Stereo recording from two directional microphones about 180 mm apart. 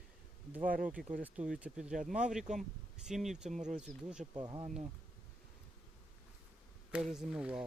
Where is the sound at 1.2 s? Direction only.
5° right (ahead or behind).